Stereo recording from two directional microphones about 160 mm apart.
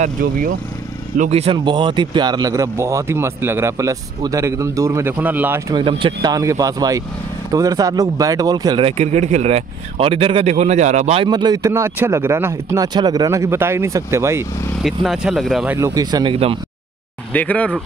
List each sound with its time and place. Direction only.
0.0 s speech: 60° right (ahead or behind)
1.1 s speech: 45° right (ahead or behind); by 5.6 s 10° right (ahead or behind)
5.7 s speech: 30° right (ahead or behind)
8.8 s speech: 45° right (ahead or behind)
11.2 s speech: 25° right (ahead or behind)
14.8 s speech: centre (ahead or behind)
15.7 s speech: 20° right (ahead or behind)
17.3 s speech: 10° left (ahead or behind)